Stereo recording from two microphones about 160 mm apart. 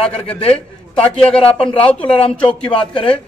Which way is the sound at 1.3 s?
35° left (ahead or behind).